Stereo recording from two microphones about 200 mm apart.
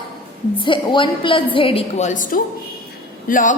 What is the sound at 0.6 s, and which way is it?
A woman's voice, 25° left (ahead or behind).